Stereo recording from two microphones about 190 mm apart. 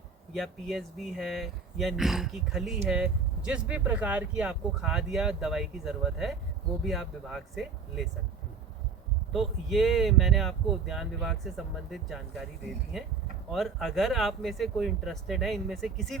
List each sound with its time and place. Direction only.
0.3 s speech: centre (ahead or behind)
9.3 s speech: centre (ahead or behind)